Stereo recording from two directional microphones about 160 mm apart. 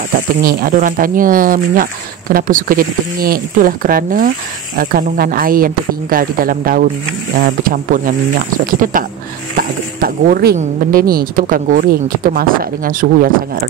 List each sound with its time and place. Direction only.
0.4 s speech: 65° right (ahead or behind)